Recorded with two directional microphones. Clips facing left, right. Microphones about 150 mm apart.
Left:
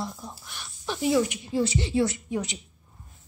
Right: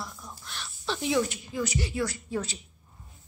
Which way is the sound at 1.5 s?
30° left (ahead or behind).